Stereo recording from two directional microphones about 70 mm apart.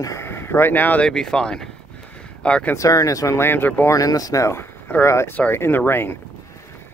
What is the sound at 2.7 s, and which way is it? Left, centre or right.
Speech, left.